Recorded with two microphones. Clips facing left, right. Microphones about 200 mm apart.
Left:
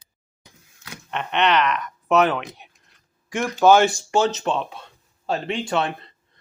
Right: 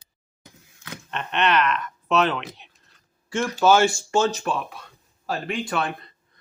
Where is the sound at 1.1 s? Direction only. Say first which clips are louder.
Left 2 dB; 15° left (ahead or behind).